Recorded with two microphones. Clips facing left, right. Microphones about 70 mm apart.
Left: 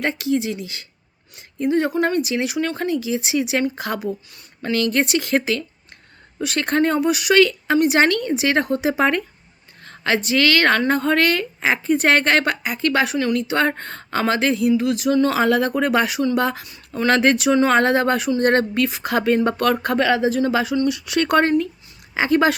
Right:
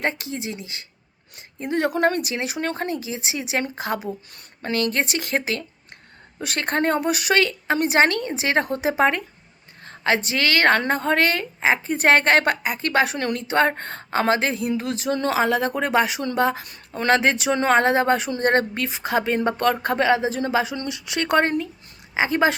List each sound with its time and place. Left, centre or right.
0.0 s speech: right
1.6 s speech: right
2.3 s a woman's voice: right
15.3 s a woman's voice: centre